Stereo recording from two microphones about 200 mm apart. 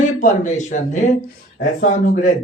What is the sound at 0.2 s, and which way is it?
Speech, 35° left (ahead or behind).